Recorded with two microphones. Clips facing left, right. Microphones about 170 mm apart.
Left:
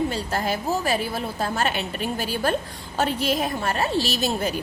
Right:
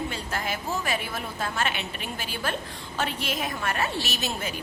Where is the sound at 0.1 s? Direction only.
35° left (ahead or behind).